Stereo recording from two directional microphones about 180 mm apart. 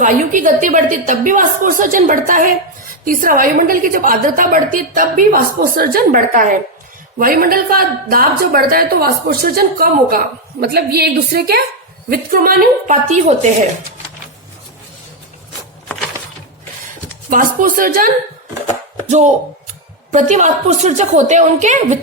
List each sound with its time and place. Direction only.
0.0 s a woman's voice: 45° right (ahead or behind); by 11.6 s 60° right (ahead or behind)
12.0 s a woman's voice: 50° right (ahead or behind)
17.2 s a woman's voice: 50° right (ahead or behind)